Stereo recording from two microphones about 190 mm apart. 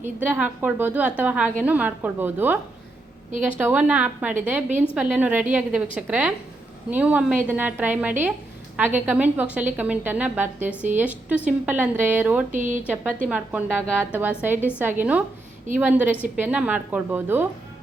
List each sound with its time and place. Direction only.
0.0 s a woman's voice: 10° right (ahead or behind)
3.6 s a woman's voice: 10° right (ahead or behind)
12.5 s speech: 40° right (ahead or behind)
13.2 s a woman's voice: 10° right (ahead or behind)